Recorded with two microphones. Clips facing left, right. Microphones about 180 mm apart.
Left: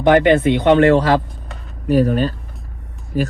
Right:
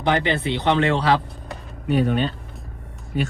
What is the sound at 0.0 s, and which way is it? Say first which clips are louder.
Speech: left 9 dB; 55° left (ahead or behind).